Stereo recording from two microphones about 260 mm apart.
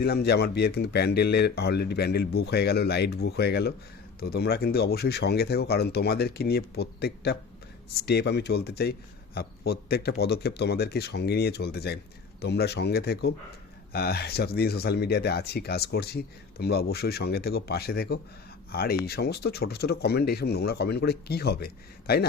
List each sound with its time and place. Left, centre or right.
0.0 s speech: left